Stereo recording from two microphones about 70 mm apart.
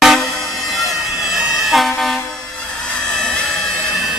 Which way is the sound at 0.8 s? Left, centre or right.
Centre.